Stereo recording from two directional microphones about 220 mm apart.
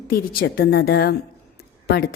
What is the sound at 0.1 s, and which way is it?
A woman's voice, 40° left (ahead or behind).